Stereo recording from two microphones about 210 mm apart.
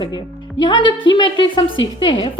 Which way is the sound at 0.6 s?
20° left (ahead or behind).